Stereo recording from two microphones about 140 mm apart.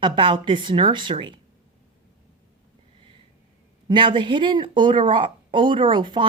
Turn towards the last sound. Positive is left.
turn(degrees=-35)  # may be behind; listen again after turning